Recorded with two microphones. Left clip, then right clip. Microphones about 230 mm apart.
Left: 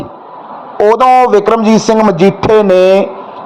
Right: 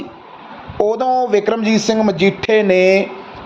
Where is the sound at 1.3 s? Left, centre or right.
Centre.